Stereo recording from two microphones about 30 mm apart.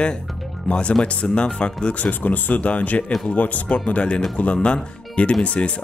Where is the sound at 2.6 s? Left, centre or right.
Left.